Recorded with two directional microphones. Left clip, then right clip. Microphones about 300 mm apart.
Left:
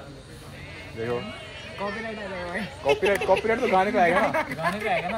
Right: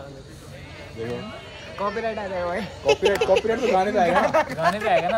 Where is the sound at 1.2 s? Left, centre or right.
Right.